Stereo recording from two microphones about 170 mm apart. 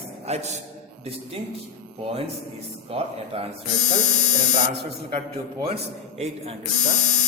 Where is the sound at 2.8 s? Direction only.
35° right (ahead or behind).